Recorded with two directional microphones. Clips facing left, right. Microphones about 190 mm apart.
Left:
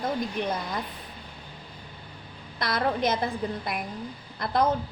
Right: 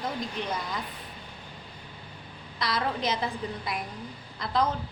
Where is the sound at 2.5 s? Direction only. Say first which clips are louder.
Left 3 dB; 55° left (ahead or behind).